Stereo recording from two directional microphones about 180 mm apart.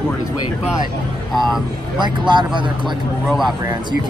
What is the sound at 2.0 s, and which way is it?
Speech, 25° right (ahead or behind).